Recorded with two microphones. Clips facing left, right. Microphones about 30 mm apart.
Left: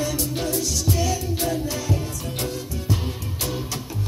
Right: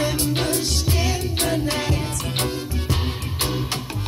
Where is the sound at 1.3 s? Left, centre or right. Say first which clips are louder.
Right 3 dB; right.